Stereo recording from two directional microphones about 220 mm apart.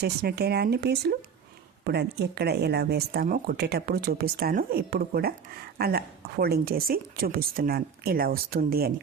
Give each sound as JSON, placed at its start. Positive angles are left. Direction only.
{"t": 0.0, "sound": "speech", "side_deg": -45}